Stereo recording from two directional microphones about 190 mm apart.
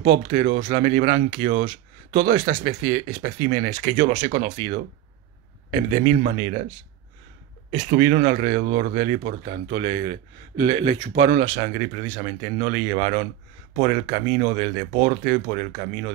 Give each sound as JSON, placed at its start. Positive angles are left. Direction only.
{"t": 0.3, "sound": "speech", "side_deg": -50}
{"t": 5.9, "sound": "speech", "side_deg": -45}
{"t": 7.7, "sound": "speech", "side_deg": -50}
{"t": 10.9, "sound": "speech", "side_deg": -35}
{"t": 11.3, "sound": "speech", "side_deg": -50}